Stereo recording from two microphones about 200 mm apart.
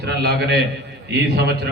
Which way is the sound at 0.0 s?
55° right (ahead or behind).